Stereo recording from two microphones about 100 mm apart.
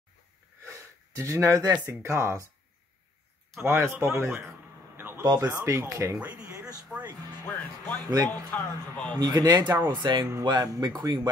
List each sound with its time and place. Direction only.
0.7 s a sound: 30° right (ahead or behind)
1.7 s speech: 25° right (ahead or behind)
3.6 s a sound: 25° right (ahead or behind)
5.5 s speech: 30° right (ahead or behind)
7.4 s music: 20° left (ahead or behind)
8.0 s speech: 40° right (ahead or behind)
8.3 s a man's voice: 15° left (ahead or behind)
9.2 s speech: 40° right (ahead or behind)